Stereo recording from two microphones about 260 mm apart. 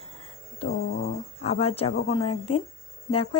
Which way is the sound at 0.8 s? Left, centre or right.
Left.